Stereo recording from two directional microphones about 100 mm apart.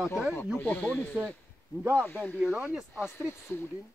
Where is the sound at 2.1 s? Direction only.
20° left (ahead or behind).